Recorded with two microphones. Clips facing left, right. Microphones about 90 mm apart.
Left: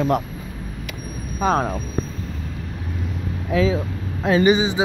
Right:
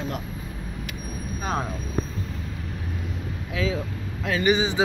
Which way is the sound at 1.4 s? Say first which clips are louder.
Left 9 dB; 80° left.